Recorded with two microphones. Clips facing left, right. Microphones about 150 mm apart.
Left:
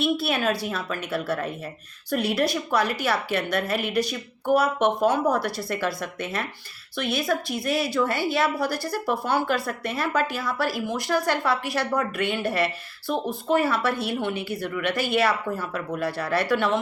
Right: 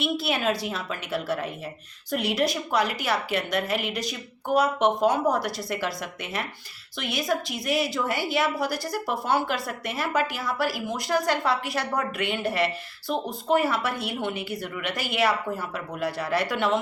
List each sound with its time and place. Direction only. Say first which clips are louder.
0.0 s a woman's voice: left 2 dB; 20° right (ahead or behind)